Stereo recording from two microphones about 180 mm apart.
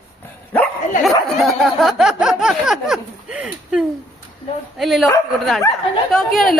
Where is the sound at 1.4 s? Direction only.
Centre (ahead or behind).